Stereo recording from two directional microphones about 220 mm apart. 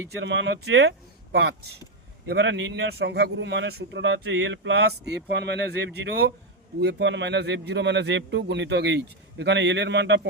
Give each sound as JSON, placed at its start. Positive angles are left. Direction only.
{"t": 0.2, "sound": "a man's voice", "side_deg": -55}